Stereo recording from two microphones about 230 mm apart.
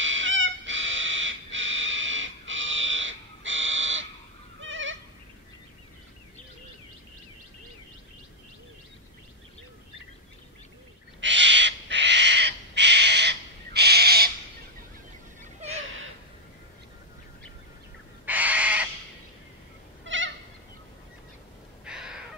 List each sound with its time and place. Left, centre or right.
0.0 s cat: right
4.6 s goat: right
11.1 s owl: right
18.2 s crow: centre
20.1 s goat: right
21.8 s a sound: centre